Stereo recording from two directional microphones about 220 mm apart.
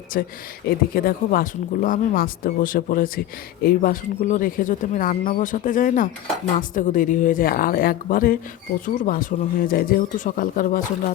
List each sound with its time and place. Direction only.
0.1 s speech: 40° left (ahead or behind)